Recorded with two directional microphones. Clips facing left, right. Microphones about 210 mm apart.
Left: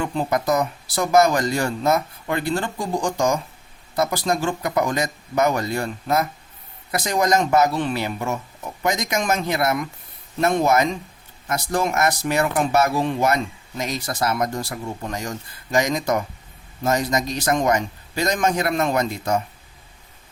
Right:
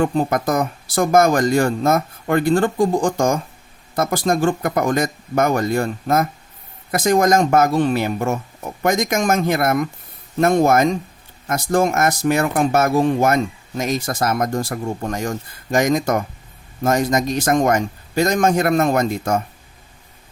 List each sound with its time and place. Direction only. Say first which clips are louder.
0.0 s speech: right 4 dB; 50° right (ahead or behind)